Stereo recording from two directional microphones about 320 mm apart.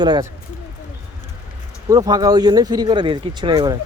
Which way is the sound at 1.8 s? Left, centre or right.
Centre.